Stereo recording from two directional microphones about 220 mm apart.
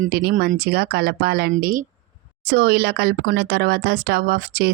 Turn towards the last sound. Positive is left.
turn(degrees=-45)  # may be behind; listen again after turning